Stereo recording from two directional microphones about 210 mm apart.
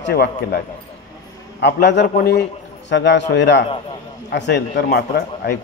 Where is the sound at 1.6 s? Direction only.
55° left (ahead or behind).